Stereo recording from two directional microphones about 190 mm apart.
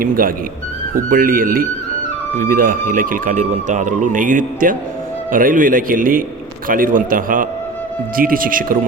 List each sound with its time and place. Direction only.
0.0 s speech: 50° right (ahead or behind)